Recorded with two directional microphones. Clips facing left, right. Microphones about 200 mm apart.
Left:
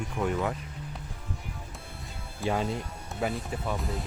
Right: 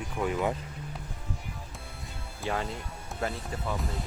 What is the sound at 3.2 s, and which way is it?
Speech, 10° left (ahead or behind).